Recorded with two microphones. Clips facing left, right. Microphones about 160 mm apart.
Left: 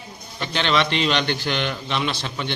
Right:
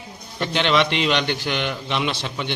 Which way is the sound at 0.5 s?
15° right (ahead or behind).